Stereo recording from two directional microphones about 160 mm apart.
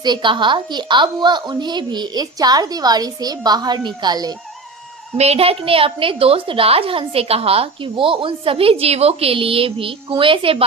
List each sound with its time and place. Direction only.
0.0 s a woman's voice: 30° right (ahead or behind)
5.1 s a woman's voice: 40° right (ahead or behind)